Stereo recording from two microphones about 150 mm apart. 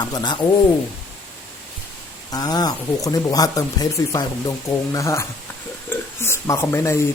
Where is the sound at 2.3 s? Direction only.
25° left (ahead or behind).